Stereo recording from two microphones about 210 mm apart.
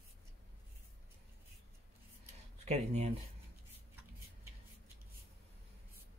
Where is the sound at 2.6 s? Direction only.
30° right (ahead or behind).